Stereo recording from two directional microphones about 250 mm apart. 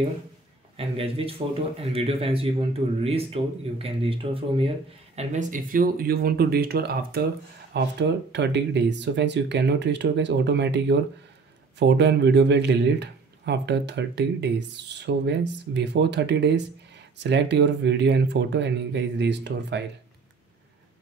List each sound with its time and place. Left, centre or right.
0.7 s speech: right